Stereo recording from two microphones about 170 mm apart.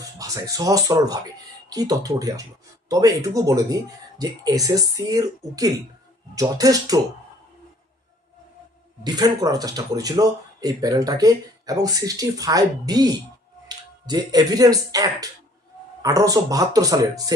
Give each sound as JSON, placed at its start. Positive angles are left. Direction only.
{"t": 0.2, "sound": "speech", "side_deg": -20}
{"t": 9.0, "sound": "speech", "side_deg": -25}